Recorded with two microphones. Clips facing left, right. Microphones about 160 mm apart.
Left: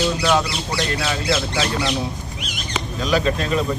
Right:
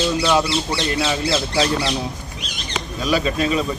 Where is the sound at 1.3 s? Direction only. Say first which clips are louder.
Right 2 dB; 30° right (ahead or behind).